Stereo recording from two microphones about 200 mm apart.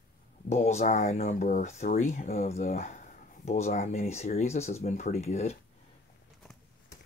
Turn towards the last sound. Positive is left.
turn(degrees=35)  # may be behind; listen again after turning